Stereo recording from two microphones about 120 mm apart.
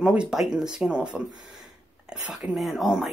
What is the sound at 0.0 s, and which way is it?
Speech, 5° right (ahead or behind).